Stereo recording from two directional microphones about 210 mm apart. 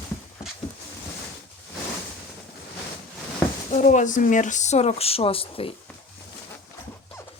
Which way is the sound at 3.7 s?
35° left (ahead or behind).